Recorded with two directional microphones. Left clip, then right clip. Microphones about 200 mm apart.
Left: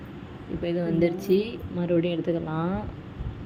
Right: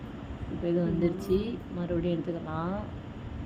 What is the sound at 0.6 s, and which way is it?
A woman's voice, 15° left (ahead or behind).